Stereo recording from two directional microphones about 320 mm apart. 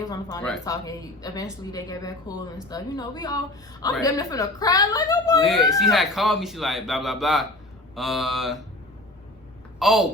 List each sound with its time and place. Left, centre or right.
0.1 s a woman's voice: centre
5.4 s speech: centre
9.7 s a woman's voice: centre